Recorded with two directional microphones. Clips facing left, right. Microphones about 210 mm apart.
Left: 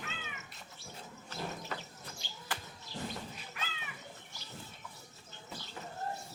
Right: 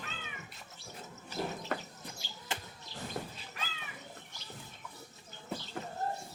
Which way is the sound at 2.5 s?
25° right (ahead or behind).